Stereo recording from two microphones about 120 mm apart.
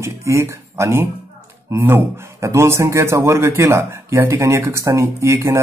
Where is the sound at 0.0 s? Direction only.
25° right (ahead or behind).